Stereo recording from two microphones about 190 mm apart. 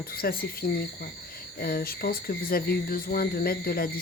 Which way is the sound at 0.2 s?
50° left (ahead or behind).